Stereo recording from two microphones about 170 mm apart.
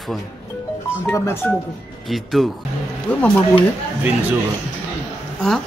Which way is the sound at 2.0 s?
Centre (ahead or behind).